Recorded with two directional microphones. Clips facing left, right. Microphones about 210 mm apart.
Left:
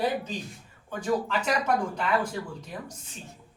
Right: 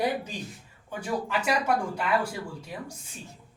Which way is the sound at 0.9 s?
10° right (ahead or behind).